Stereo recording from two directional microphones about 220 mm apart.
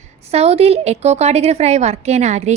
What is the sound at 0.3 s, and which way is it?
A woman's voice, 25° right (ahead or behind).